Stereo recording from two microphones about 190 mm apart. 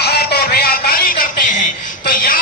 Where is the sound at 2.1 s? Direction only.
45° left (ahead or behind).